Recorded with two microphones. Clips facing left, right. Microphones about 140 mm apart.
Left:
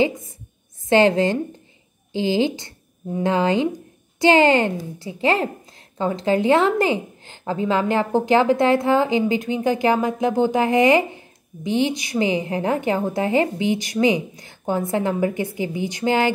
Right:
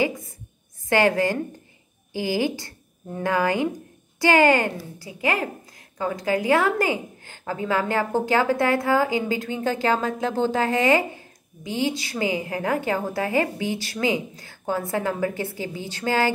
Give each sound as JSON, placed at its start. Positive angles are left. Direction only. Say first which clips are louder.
{"t": 0.8, "sound": "a woman's voice", "louder": "left 4 dB", "side_deg": 25}